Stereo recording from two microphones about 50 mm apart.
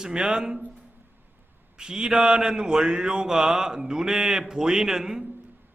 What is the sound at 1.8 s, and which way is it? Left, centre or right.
A man's voice, centre.